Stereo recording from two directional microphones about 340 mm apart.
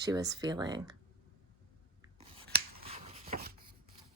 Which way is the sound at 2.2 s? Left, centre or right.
Centre.